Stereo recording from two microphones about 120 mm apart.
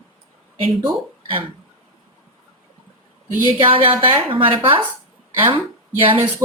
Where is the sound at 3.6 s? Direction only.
45° right (ahead or behind).